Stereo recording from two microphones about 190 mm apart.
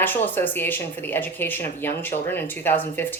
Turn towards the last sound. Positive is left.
turn(degrees=10)  # may be behind; listen again after turning